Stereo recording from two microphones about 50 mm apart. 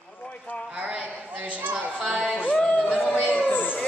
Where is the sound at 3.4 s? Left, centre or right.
Left.